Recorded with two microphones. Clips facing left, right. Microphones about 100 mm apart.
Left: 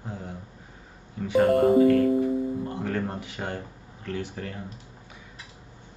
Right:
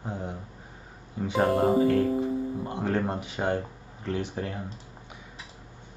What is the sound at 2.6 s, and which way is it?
Speech, 20° right (ahead or behind).